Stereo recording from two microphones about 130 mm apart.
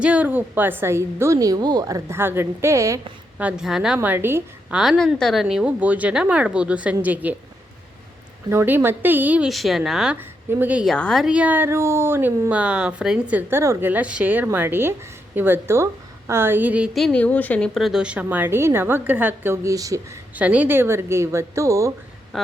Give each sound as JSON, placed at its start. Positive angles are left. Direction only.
{"t": 0.0, "sound": "a woman's voice", "side_deg": -10}
{"t": 3.3, "sound": "a woman's voice", "side_deg": -5}
{"t": 4.7, "sound": "a woman's voice", "side_deg": 0}
{"t": 8.4, "sound": "a woman's voice", "side_deg": -15}
{"t": 9.5, "sound": "speech", "side_deg": 0}
{"t": 10.2, "sound": "speech", "side_deg": -15}
{"t": 10.8, "sound": "speech", "side_deg": 5}
{"t": 11.3, "sound": "a woman's voice", "side_deg": -10}
{"t": 17.7, "sound": "a woman's voice", "side_deg": -5}
{"t": 20.3, "sound": "a woman's voice", "side_deg": -10}